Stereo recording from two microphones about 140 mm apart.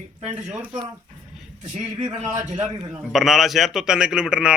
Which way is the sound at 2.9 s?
Centre (ahead or behind).